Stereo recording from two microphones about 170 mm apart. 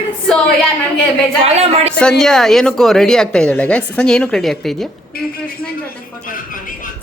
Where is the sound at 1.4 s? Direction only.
40° right (ahead or behind).